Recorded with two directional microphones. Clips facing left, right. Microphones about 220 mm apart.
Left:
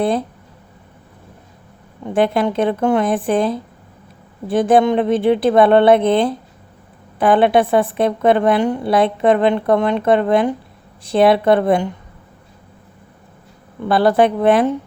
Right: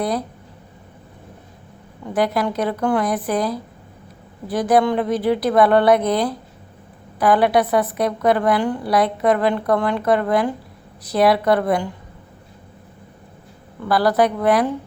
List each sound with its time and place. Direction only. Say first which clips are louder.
0.0 s a woman's voice: left 5 dB; 25° left (ahead or behind)
2.0 s a woman's voice: left 4 dB; 25° left (ahead or behind)
13.8 s a woman's voice: left 3 dB; 25° left (ahead or behind)